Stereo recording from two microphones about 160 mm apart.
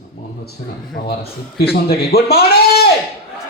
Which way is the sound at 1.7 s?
70° left (ahead or behind).